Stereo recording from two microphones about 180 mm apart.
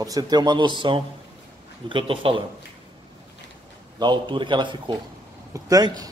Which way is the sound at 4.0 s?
25° right (ahead or behind).